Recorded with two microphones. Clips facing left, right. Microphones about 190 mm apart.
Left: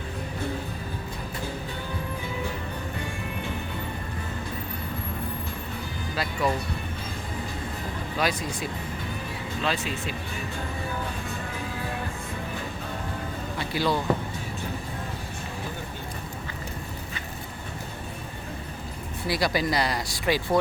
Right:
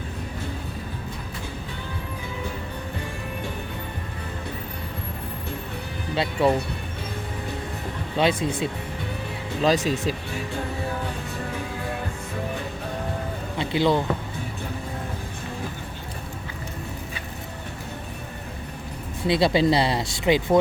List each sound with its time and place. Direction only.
6.1 s speech: 30° right (ahead or behind)
8.2 s speech: 30° right (ahead or behind)
9.6 s speech: 40° right (ahead or behind)
13.6 s speech: 20° right (ahead or behind)
19.3 s speech: 25° right (ahead or behind)